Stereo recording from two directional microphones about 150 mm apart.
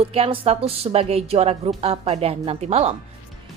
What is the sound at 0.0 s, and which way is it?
A woman's voice, 40° right (ahead or behind).